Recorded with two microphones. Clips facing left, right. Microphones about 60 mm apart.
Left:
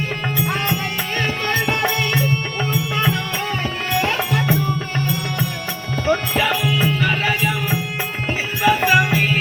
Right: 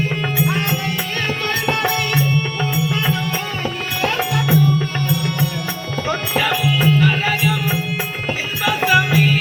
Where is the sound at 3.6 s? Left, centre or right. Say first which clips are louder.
Even; centre.